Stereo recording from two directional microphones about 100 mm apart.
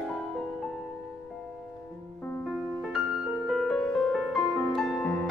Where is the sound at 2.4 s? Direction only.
Centre (ahead or behind).